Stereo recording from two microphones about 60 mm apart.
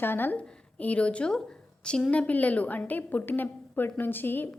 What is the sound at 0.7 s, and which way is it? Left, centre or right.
A woman's voice, left.